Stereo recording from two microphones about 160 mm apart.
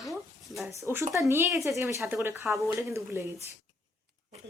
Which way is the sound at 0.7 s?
15° right (ahead or behind).